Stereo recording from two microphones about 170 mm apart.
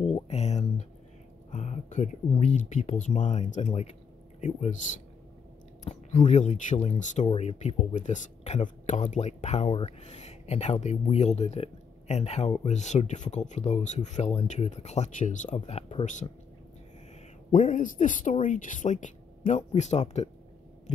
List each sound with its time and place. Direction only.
0.0 s a sound: 40° left (ahead or behind)
1.5 s speech: 45° left (ahead or behind)
5.9 s speech: 45° left (ahead or behind)
17.5 s speech: 50° left (ahead or behind)